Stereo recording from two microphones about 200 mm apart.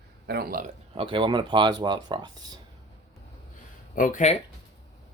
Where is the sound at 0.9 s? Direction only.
25° right (ahead or behind).